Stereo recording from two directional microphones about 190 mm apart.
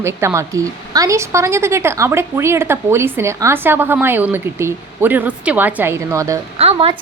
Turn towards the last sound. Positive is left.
turn(degrees=-30)  # may be behind; listen again after turning